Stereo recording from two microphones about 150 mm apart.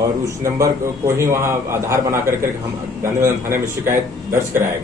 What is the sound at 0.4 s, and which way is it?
A man's voice, 20° right (ahead or behind).